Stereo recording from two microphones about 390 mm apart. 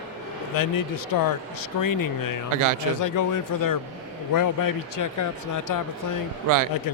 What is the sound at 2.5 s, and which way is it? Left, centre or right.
Speech, right.